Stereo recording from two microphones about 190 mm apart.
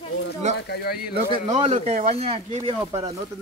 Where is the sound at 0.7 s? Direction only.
55° left (ahead or behind).